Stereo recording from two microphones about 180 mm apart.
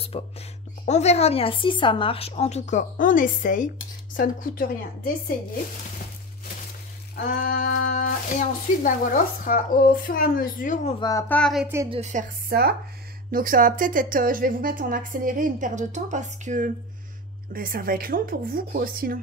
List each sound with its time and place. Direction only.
0.1 s a woman's voice: 35° left (ahead or behind); by 5.1 s 50° left (ahead or behind)
7.2 s speech: 50° left (ahead or behind)
11.0 s speech: 20° left (ahead or behind)
11.2 s a sound: 5° left (ahead or behind)
11.6 s a woman's voice: 15° right (ahead or behind)
11.9 s speech: 40° right (ahead or behind)
12.5 s a woman's voice: 60° right (ahead or behind); by 16.7 s 45° right (ahead or behind)
17.5 s a woman's voice: 55° right (ahead or behind)